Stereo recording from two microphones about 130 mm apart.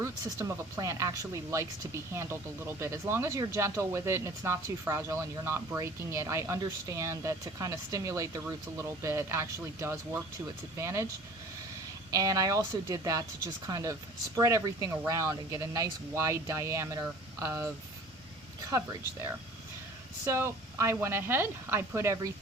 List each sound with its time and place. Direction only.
0.0 s speech: 20° right (ahead or behind)
12.1 s speech: 25° right (ahead or behind)
20.2 s speech: 20° right (ahead or behind)